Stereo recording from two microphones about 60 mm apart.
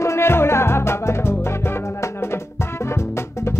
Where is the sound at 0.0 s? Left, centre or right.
Left.